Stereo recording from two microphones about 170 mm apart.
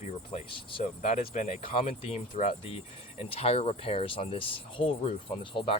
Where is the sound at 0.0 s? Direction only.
35° left (ahead or behind).